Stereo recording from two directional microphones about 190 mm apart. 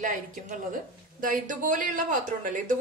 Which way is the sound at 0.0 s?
40° right (ahead or behind).